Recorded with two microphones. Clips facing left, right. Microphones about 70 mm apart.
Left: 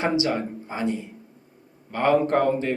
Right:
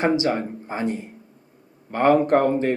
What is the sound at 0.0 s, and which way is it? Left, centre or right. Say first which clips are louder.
Speech: right 3 dB; right.